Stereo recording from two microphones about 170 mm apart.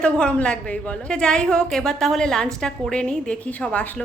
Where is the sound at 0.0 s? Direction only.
5° left (ahead or behind).